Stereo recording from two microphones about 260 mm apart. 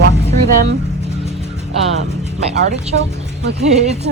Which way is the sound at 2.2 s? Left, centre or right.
Right.